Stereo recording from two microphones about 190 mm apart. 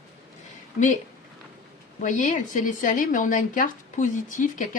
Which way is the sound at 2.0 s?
40° left (ahead or behind).